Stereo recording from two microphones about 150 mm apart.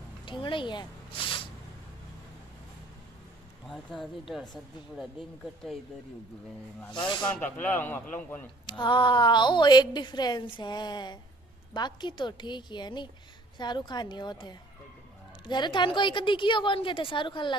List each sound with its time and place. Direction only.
0.2 s a sound: 30° left (ahead or behind)
3.6 s speech: centre (ahead or behind)
6.9 s a woman's voice: 30° left (ahead or behind)
7.2 s a man's voice: 10° left (ahead or behind)
8.6 s a woman's voice: 30° left (ahead or behind)